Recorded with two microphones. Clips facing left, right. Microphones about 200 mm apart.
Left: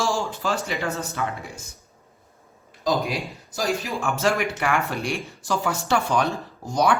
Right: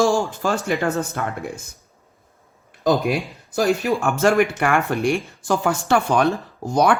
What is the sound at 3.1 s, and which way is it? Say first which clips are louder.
Speech: right 7 dB; 55° right (ahead or behind).